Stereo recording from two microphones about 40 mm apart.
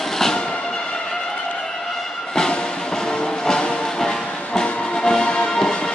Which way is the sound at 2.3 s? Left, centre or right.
Centre.